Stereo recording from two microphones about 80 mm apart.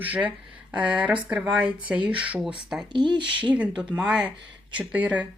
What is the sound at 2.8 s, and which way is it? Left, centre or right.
Speech, right.